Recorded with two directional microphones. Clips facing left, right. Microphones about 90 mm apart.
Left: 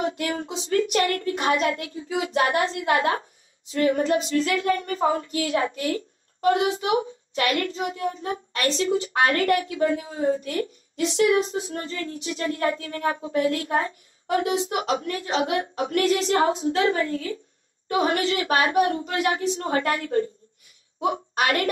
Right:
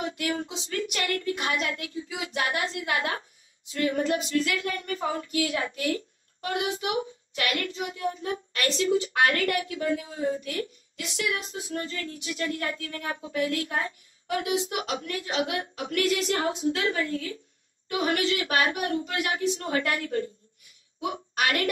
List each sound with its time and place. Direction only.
0.5 s a woman's voice: 35° left (ahead or behind)